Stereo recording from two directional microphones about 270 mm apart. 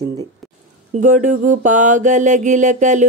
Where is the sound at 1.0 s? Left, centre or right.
Right.